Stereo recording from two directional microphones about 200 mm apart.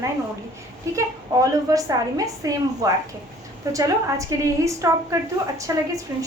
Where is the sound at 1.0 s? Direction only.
15° right (ahead or behind).